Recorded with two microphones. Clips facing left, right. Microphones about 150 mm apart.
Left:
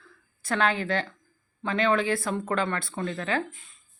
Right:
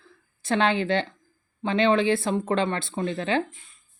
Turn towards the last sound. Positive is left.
turn(degrees=-25)  # may be behind; listen again after turning